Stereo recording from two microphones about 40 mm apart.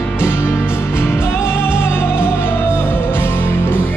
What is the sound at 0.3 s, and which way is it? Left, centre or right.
Music, left.